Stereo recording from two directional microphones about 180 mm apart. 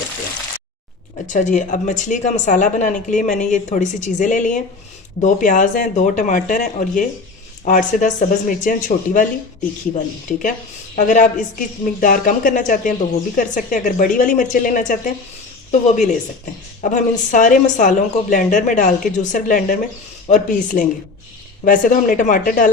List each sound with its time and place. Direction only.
1.3 s a woman's voice: 45° left (ahead or behind)